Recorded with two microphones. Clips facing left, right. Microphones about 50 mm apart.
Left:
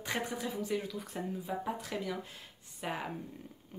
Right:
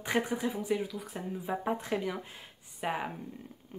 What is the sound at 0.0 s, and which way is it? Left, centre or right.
Speech, centre.